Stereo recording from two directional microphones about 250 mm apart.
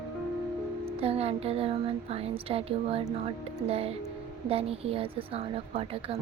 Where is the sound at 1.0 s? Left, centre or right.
Right.